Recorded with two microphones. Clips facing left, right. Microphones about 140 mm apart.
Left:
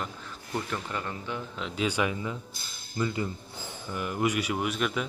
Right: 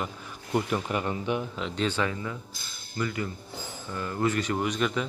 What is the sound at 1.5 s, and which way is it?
A man's voice, 5° left (ahead or behind).